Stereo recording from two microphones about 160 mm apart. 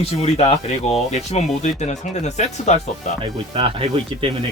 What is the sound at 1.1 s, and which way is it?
Speech, 40° left (ahead or behind).